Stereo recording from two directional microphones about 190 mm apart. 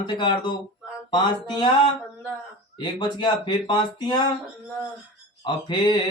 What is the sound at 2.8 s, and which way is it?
Music, 25° left (ahead or behind).